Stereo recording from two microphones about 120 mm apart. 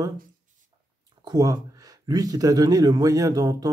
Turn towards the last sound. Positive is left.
turn(degrees=-30)  # may be behind; listen again after turning